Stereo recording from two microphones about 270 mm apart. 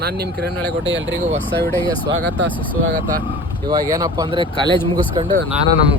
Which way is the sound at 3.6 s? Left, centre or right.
Centre.